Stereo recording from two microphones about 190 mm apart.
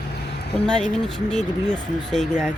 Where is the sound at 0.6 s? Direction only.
5° left (ahead or behind).